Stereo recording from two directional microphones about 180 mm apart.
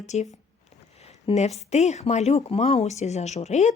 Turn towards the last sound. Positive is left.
turn(degrees=40)  # may be behind; listen again after turning